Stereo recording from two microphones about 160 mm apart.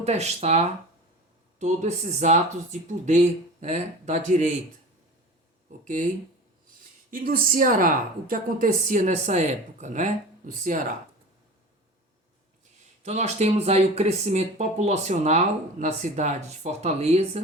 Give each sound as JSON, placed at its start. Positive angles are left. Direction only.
{"t": 0.0, "sound": "speech", "side_deg": -45}
{"t": 3.6, "sound": "speech", "side_deg": -45}
{"t": 5.8, "sound": "speech", "side_deg": -50}
{"t": 7.1, "sound": "a woman's voice", "side_deg": -60}
{"t": 13.0, "sound": "speech", "side_deg": -45}